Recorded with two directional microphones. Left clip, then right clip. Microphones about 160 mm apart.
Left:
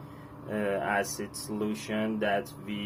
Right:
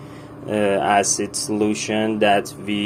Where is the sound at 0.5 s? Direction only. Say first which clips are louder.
Right 12 dB; 30° right (ahead or behind).